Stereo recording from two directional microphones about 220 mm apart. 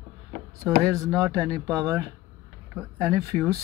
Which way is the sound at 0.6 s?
15° right (ahead or behind).